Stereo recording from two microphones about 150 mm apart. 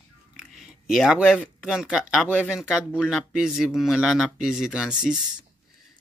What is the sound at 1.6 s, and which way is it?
Speech, 5° right (ahead or behind).